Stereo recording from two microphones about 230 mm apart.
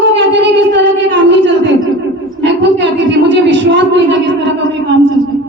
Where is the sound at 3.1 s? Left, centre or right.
Right.